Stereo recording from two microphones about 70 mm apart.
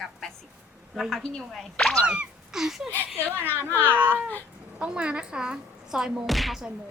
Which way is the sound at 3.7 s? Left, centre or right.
Left.